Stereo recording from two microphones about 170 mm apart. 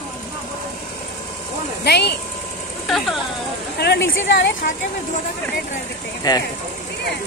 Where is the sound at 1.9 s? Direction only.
80° left.